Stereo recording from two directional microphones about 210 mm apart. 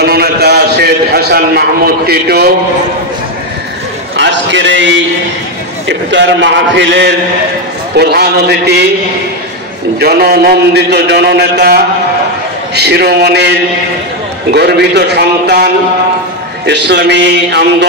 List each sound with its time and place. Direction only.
0.0 s a sound: 50° right (ahead or behind)
4.2 s a man's voice: 60° right (ahead or behind)
9.9 s a man's voice: 45° right (ahead or behind)
16.6 s a man's voice: 55° right (ahead or behind)